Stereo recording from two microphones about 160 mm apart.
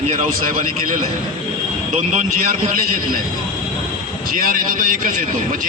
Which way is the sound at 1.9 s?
50° right (ahead or behind).